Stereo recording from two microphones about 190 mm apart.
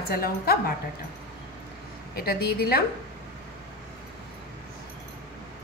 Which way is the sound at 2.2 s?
55° left (ahead or behind).